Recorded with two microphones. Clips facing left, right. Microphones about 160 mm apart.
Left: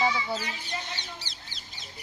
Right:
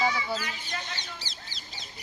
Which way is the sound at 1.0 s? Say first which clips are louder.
Even; 60° left (ahead or behind).